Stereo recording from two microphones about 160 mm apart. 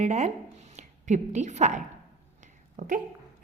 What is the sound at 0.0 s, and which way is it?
A woman's voice, 45° right (ahead or behind).